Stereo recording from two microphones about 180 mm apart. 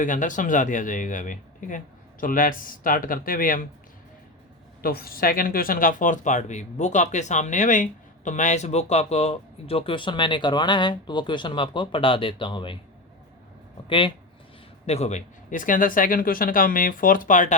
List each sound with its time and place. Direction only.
0.0 s speech: 45° left (ahead or behind)
4.8 s speech: 55° left (ahead or behind); by 12.8 s 25° left (ahead or behind)
14.8 s speech: 35° left (ahead or behind)